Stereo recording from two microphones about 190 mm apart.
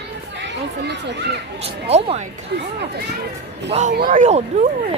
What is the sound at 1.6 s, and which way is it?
Speech, 35° right (ahead or behind).